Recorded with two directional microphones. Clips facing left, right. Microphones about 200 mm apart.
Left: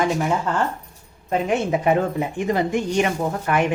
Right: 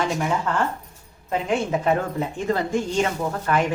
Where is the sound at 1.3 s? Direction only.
20° left (ahead or behind).